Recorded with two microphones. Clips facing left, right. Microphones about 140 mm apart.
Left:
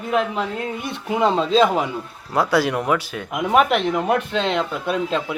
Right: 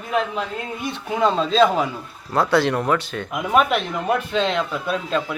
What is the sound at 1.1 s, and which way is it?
A man's voice, 15° left (ahead or behind).